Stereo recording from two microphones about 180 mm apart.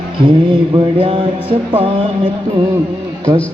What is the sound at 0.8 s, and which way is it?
Music, 30° right (ahead or behind).